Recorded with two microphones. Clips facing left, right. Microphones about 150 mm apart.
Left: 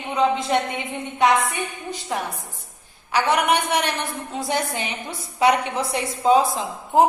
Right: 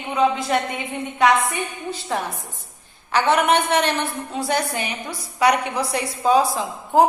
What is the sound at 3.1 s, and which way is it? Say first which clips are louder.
A woman's voice: right 2 dB; 10° left (ahead or behind).